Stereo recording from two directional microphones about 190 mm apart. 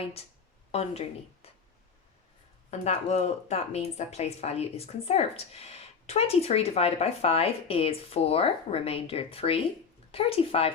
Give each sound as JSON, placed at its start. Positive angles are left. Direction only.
{"t": 0.0, "sound": "speech", "side_deg": 30}
{"t": 2.6, "sound": "speech", "side_deg": 35}